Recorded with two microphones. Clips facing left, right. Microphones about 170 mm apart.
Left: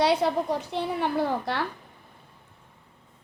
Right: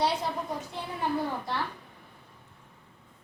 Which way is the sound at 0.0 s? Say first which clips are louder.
Left 6 dB; 75° left (ahead or behind).